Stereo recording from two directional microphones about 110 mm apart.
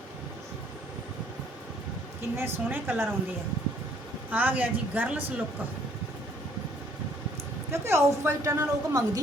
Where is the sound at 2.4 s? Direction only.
20° right (ahead or behind).